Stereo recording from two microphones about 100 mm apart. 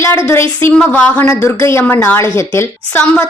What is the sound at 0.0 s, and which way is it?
Speech, 25° left (ahead or behind).